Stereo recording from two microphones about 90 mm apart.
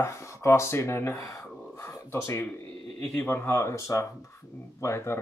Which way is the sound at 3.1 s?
25° left (ahead or behind).